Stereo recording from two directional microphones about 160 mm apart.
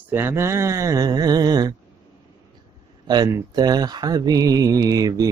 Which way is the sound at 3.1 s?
20° right (ahead or behind).